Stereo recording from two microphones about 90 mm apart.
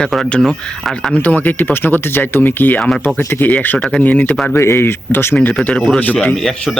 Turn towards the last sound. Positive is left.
turn(degrees=20)  # may be behind; listen again after turning